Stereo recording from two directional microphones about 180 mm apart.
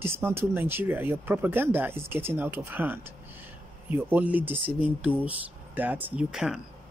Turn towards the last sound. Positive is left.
turn(degrees=-5)  # may be behind; listen again after turning